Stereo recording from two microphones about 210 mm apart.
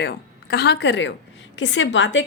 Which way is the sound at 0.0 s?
50° left (ahead or behind).